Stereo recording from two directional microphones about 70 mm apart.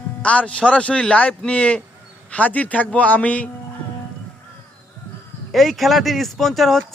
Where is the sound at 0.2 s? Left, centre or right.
Centre.